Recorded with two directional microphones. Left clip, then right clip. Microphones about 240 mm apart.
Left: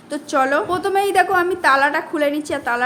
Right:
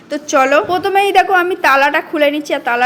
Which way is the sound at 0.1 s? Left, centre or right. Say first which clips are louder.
Right 6 dB; centre.